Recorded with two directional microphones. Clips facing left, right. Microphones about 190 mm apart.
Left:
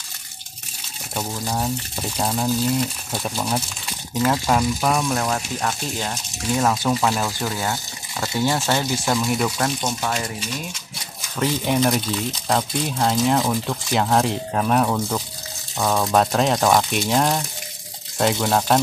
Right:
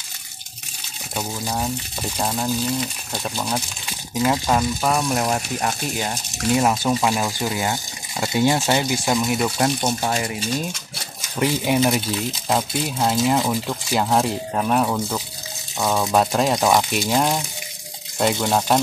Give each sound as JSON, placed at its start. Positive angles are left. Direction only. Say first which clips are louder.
{"t": 1.1, "sound": "speech", "louder": "even", "side_deg": 0}
{"t": 4.1, "sound": "speech", "louder": "even", "side_deg": -10}
{"t": 5.0, "sound": "speech", "louder": "right 1 dB", "side_deg": -15}
{"t": 9.8, "sound": "speech", "louder": "right 2 dB", "side_deg": -30}
{"t": 11.1, "sound": "speech", "louder": "right 1 dB", "side_deg": -10}